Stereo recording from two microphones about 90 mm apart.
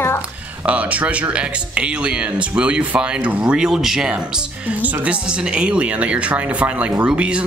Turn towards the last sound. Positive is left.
turn(degrees=-10)  # may be behind; listen again after turning